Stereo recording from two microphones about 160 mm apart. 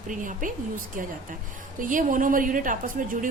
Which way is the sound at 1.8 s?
55° right (ahead or behind).